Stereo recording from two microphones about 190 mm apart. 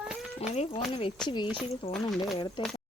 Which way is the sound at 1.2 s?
25° left (ahead or behind).